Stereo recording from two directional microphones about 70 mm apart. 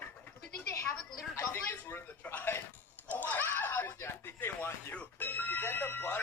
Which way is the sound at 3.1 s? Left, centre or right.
Left.